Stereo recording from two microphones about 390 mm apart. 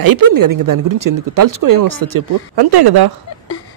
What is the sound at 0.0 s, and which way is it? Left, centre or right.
Speech, right.